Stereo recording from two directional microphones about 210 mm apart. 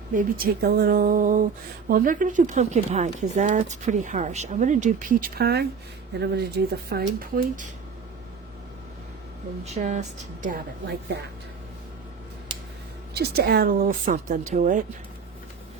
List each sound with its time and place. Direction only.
0.1 s speech: 40° right (ahead or behind)
6.9 s speech: 40° right (ahead or behind)
9.6 s speech: 35° right (ahead or behind)
10.4 s speech: 45° right (ahead or behind)
13.1 s speech: 50° right (ahead or behind)